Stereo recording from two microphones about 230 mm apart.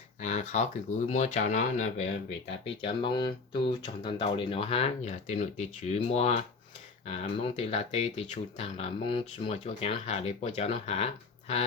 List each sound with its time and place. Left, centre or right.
0.2 s speech: left